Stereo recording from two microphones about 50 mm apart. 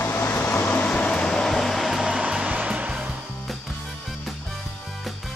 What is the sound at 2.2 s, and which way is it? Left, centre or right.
Hair dryer, right.